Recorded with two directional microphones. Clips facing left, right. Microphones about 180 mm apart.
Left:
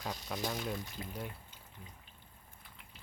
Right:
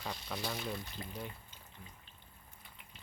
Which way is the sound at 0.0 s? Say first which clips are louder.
Left 2 dB; 10° left (ahead or behind).